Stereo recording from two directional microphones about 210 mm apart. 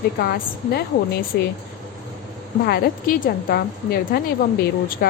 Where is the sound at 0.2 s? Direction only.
50° left (ahead or behind).